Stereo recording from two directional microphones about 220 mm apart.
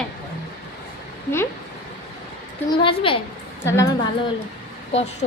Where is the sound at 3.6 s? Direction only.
15° left (ahead or behind).